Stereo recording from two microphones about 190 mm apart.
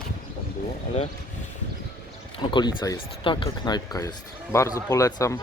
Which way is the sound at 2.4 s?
25° left (ahead or behind).